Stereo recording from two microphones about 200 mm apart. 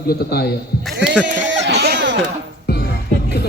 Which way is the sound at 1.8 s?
60° right (ahead or behind).